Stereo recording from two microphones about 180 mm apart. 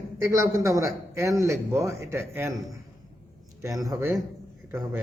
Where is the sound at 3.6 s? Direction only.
20° right (ahead or behind).